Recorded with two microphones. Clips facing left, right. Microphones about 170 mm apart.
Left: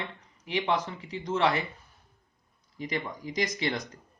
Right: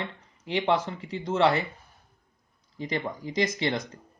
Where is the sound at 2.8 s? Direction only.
30° right (ahead or behind).